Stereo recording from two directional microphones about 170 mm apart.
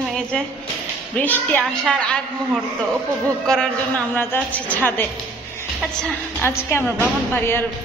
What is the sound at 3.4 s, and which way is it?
A woman's voice, 5° left (ahead or behind).